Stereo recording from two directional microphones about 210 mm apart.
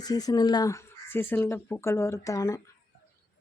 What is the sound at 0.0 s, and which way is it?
Speech, 20° left (ahead or behind).